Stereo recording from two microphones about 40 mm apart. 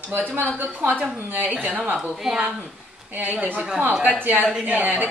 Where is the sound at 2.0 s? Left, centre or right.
Centre.